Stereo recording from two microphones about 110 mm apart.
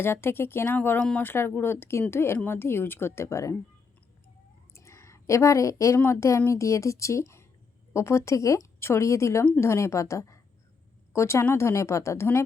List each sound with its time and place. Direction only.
0.0 s speech: 20° left (ahead or behind)
0.9 s speech: 10° left (ahead or behind)
1.2 s speech: 20° left (ahead or behind)
4.7 s a sound: 25° left (ahead or behind)
6.1 s a woman's voice: 30° left (ahead or behind)